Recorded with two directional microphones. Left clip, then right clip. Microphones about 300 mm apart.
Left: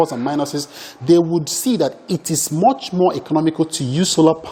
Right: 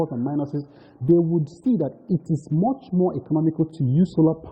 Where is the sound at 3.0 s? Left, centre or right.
Centre.